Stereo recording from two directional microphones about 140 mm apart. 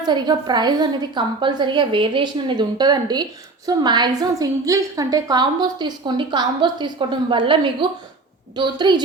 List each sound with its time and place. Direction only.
0.0 s a woman's voice: 30° right (ahead or behind)